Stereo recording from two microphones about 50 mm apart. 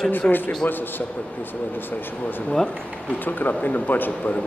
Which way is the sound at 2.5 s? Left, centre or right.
Centre.